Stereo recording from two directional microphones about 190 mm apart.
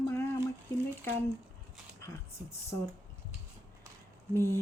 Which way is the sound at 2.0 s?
15° left (ahead or behind).